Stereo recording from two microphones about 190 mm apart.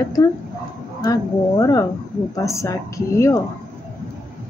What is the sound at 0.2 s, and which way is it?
A woman's voice, 20° left (ahead or behind).